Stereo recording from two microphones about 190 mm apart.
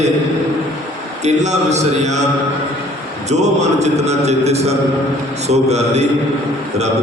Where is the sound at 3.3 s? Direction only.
35° right (ahead or behind).